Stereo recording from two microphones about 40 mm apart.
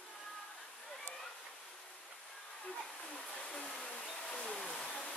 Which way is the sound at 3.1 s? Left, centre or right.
Left.